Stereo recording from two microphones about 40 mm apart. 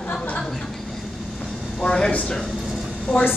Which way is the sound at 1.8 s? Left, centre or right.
Left.